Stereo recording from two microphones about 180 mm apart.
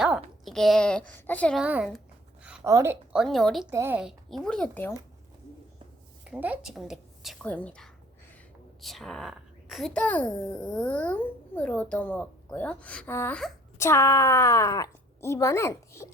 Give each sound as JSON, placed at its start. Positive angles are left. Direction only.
{"t": 0.0, "sound": "a woman's voice", "side_deg": 0}
{"t": 1.6, "sound": "a woman's voice", "side_deg": -5}
{"t": 2.4, "sound": "a sound", "side_deg": -10}
{"t": 2.7, "sound": "a woman's voice", "side_deg": -15}
{"t": 3.7, "sound": "a woman's voice", "side_deg": -10}
{"t": 6.2, "sound": "a woman's voice", "side_deg": -5}